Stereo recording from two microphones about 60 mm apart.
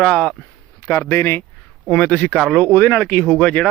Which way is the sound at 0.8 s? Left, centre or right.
Left.